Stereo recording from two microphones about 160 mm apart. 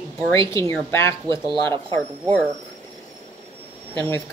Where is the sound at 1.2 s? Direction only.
30° right (ahead or behind).